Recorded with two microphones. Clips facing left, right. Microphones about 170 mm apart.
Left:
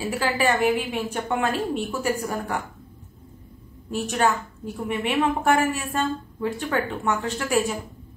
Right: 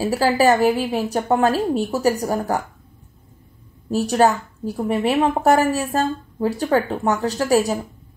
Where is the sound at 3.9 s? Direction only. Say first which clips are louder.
Right 6 dB; 35° right (ahead or behind).